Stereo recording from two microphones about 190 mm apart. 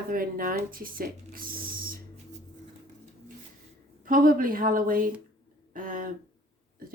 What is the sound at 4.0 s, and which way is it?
Speech, 45° right (ahead or behind).